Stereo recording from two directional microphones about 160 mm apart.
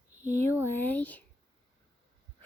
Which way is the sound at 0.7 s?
10° left (ahead or behind).